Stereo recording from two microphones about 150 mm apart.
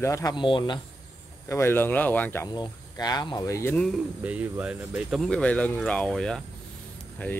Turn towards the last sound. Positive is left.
turn(degrees=10)  # may be behind; listen again after turning